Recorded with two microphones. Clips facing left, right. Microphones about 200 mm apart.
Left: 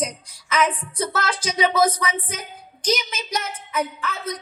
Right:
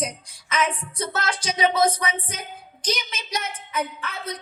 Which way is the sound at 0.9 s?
30° right (ahead or behind).